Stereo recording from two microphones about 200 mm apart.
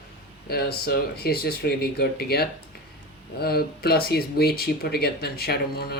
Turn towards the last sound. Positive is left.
turn(degrees=50)  # may be behind; listen again after turning